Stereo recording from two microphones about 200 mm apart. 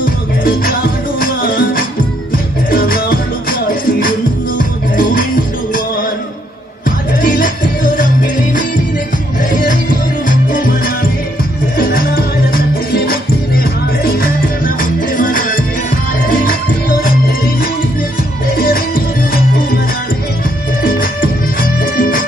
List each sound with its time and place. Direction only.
0.0 s music: 45° left (ahead or behind)
7.2 s music: 45° left (ahead or behind)
10.2 s music: 45° left (ahead or behind)
20.8 s music: 45° left (ahead or behind)